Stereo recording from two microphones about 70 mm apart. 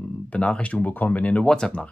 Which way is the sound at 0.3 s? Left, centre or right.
Centre.